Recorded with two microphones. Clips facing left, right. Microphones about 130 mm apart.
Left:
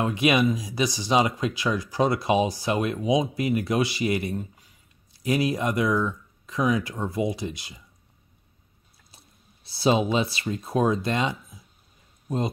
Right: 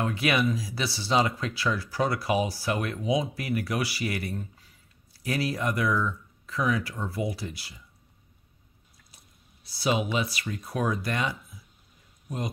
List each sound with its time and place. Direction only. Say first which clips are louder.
0.0 s speech: left 4 dB; 20° left (ahead or behind)
9.7 s speech: left 5 dB; 30° left (ahead or behind)